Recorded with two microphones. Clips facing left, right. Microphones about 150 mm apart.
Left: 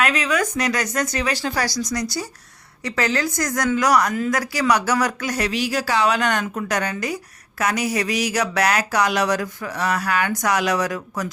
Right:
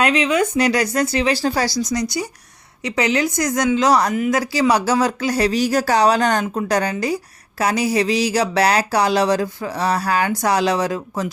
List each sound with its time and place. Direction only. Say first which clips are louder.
0.0 s speech: right 4 dB; 25° right (ahead or behind)